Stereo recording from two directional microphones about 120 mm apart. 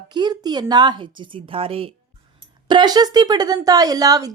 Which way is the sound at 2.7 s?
35° right (ahead or behind).